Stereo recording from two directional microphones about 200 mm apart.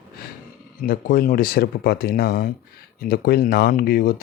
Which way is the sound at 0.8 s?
45° left (ahead or behind).